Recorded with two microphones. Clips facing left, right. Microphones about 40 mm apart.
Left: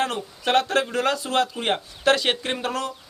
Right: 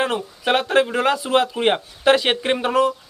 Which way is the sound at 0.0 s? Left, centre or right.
Centre.